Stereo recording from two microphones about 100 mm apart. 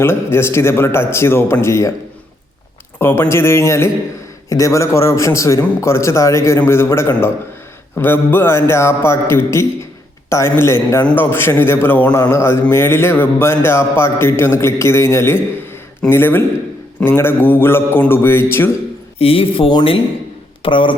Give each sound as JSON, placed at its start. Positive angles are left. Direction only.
{"t": 0.0, "sound": "speech", "side_deg": 25}
{"t": 3.0, "sound": "speech", "side_deg": 25}
{"t": 19.2, "sound": "speech", "side_deg": 70}